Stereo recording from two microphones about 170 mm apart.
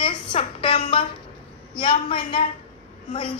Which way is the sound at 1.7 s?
30° left (ahead or behind).